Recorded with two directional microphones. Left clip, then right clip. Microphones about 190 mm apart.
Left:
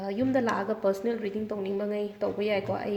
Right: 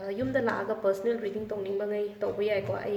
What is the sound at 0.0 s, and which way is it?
Speech, 35° left (ahead or behind).